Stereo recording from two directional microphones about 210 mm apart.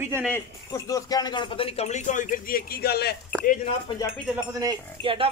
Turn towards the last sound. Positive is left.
turn(degrees=-25)  # may be behind; listen again after turning